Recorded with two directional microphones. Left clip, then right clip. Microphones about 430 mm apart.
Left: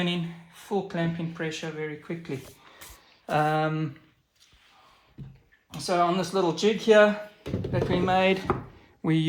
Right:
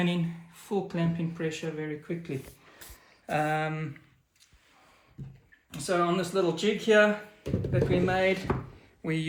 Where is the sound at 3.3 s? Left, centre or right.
Centre.